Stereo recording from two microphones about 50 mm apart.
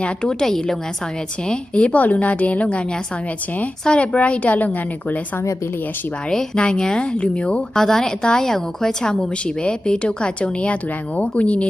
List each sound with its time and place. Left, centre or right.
0.0 s a woman's voice: centre
1.5 s a woman's voice: left
3.8 s a woman's voice: left
6.3 s a woman's voice: centre
7.8 s a woman's voice: centre; by 11.7 s left